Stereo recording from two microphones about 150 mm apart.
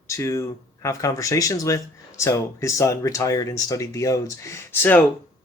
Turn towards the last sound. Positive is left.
turn(degrees=15)  # may be behind; listen again after turning